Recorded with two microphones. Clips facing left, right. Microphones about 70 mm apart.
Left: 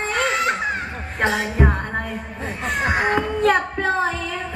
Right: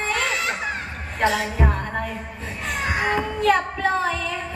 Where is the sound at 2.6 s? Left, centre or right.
Left.